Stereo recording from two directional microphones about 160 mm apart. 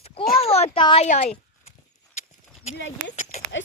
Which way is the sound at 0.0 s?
35° left (ahead or behind).